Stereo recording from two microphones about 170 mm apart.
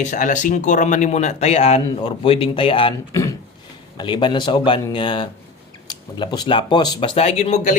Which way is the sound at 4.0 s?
25° left (ahead or behind).